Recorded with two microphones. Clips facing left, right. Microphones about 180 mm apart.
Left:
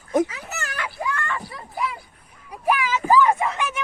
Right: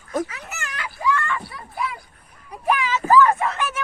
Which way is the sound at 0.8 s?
55° left (ahead or behind).